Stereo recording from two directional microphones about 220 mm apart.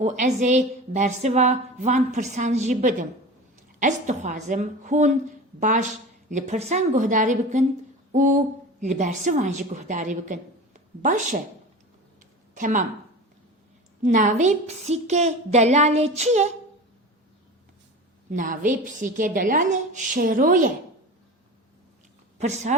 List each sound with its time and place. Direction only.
0.0 s a woman's voice: 35° right (ahead or behind)
12.5 s speech: 35° right (ahead or behind)
14.0 s a woman's voice: 35° right (ahead or behind)
18.3 s a woman's voice: 35° right (ahead or behind)
22.4 s a woman's voice: 30° right (ahead or behind)